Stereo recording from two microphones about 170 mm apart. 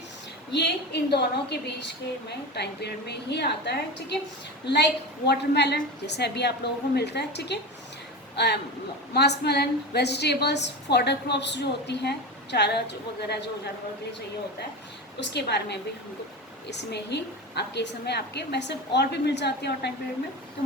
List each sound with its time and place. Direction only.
0.5 s a woman's voice: 80° left
15.2 s a woman's voice: 80° left